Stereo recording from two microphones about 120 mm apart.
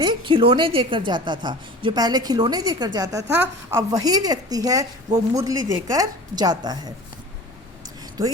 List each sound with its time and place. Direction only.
0.0 s a woman's voice: 40° right (ahead or behind)